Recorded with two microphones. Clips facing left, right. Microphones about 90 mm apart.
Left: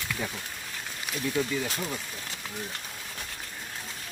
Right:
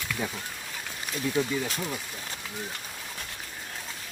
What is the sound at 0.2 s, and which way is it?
Speech, 10° right (ahead or behind).